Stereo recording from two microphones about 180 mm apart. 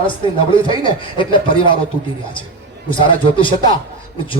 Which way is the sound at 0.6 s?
30° left (ahead or behind).